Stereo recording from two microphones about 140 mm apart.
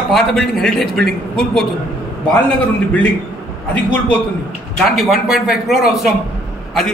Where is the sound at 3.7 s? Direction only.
10° left (ahead or behind).